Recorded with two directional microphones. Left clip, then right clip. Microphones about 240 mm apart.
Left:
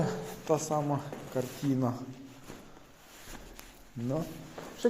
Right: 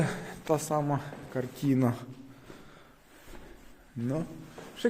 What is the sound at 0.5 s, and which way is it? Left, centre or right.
Speech, right.